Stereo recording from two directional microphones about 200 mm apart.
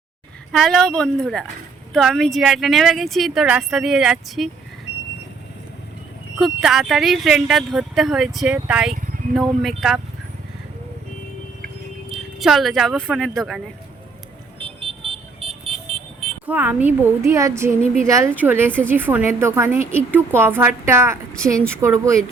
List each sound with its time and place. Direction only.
0.5 s speech: centre (ahead or behind)
6.3 s speech: centre (ahead or behind)
12.1 s speech: centre (ahead or behind)
14.6 s vehicle: 30° right (ahead or behind)
16.5 s a woman's voice: 10° right (ahead or behind)